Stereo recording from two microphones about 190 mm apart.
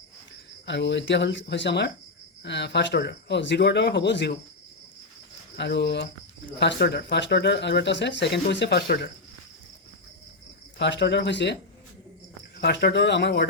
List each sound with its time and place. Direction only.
0.6 s speech: 70° left (ahead or behind)
5.5 s speech: 65° left (ahead or behind)
10.8 s speech: 65° left (ahead or behind)
12.5 s speech: 60° left (ahead or behind)